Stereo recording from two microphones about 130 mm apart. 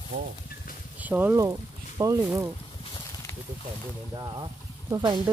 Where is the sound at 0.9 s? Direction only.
10° right (ahead or behind).